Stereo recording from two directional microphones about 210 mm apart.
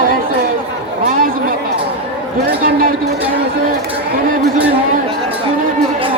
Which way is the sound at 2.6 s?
40° right (ahead or behind).